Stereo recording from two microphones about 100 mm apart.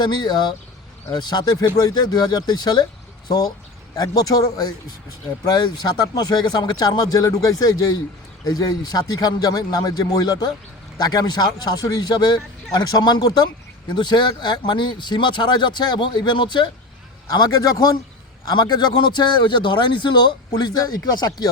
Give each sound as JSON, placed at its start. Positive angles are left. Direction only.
{"t": 0.0, "sound": "speech", "side_deg": 45}
{"t": 17.2, "sound": "speech", "side_deg": 40}